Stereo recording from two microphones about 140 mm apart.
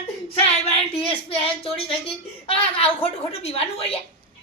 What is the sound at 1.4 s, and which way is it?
A woman's voice, 40° left (ahead or behind).